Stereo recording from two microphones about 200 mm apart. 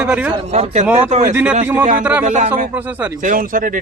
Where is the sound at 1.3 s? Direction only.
10° right (ahead or behind).